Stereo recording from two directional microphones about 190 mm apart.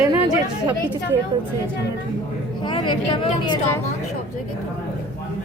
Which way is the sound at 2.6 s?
25° left (ahead or behind).